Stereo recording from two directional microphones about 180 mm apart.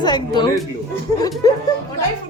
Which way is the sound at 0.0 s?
25° left (ahead or behind).